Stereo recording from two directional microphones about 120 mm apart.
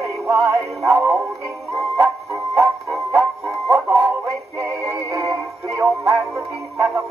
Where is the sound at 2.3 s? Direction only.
25° right (ahead or behind).